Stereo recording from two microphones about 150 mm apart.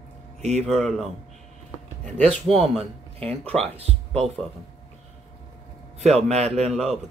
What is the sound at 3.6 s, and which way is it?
Speech, 40° right (ahead or behind).